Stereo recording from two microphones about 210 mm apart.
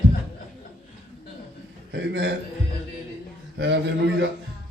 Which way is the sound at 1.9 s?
55° right (ahead or behind).